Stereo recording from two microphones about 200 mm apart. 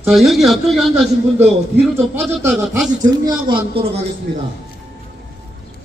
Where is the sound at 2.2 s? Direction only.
10° right (ahead or behind).